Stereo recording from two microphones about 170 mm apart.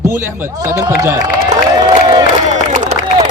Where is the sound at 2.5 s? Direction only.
45° right (ahead or behind).